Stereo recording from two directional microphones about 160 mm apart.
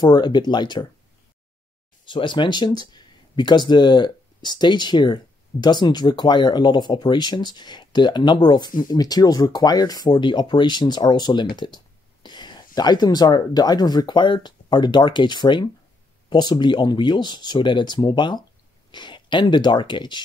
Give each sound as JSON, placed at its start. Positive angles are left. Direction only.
{"t": 0.0, "sound": "speech", "side_deg": 30}
{"t": 2.0, "sound": "speech", "side_deg": 30}